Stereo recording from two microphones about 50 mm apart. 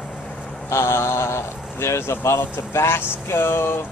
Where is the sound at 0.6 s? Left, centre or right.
Left.